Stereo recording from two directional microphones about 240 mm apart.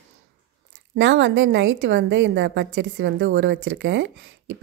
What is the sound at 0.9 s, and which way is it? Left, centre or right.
A woman's voice, right.